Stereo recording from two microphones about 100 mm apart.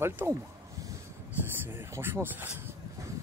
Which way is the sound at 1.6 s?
25° right (ahead or behind).